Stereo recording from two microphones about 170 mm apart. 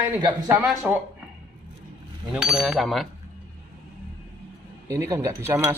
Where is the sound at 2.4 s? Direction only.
Centre (ahead or behind).